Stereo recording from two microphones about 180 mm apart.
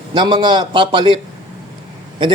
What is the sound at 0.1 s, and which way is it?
Speech, 25° right (ahead or behind).